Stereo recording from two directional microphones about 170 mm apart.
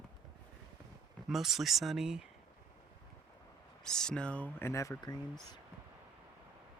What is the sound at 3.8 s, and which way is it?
Speech, 5° left (ahead or behind).